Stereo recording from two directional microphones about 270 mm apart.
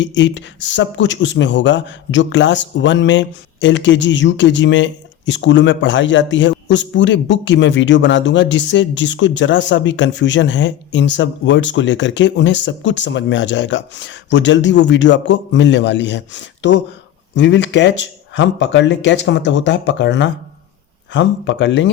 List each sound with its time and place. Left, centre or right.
0.0 s a man's voice: left